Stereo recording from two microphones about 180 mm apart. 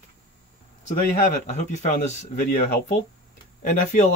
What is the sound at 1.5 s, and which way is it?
Speech, 40° left (ahead or behind).